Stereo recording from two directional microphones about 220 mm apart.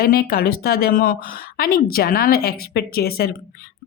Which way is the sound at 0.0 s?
45° left (ahead or behind).